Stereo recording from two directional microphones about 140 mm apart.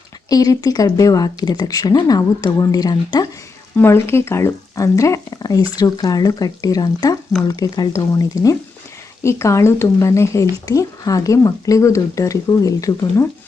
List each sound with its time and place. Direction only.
0.3 s speech: 25° left (ahead or behind)
3.8 s speech: 15° left (ahead or behind)